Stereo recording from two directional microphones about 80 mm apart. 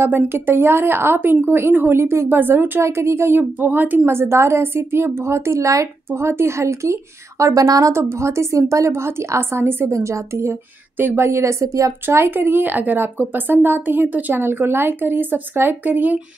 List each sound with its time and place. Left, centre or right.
0.0 s a woman's voice: right
7.9 s a woman's voice: right